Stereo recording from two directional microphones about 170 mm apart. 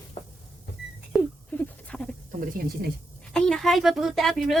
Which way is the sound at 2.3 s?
60° right (ahead or behind).